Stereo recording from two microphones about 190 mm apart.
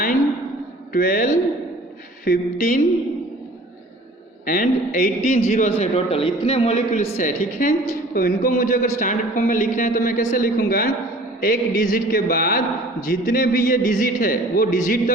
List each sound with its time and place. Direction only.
0.9 s a man's voice: 50° left (ahead or behind)
4.4 s a man's voice: 45° left (ahead or behind)